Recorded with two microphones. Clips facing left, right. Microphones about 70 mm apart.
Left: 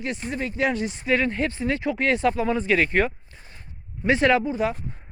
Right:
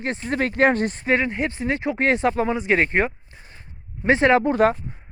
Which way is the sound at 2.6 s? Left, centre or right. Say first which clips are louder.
Right 1 dB; right.